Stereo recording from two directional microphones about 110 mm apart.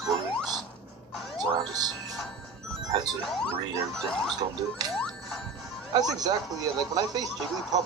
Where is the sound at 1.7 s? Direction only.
35° right (ahead or behind).